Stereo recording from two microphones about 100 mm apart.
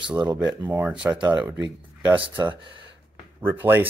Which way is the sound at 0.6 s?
20° right (ahead or behind).